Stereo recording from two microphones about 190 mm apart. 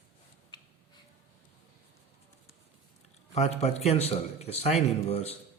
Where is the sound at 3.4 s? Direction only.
35° left (ahead or behind).